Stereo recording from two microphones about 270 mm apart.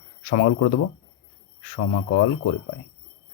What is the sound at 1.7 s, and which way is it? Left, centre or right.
Speech, left.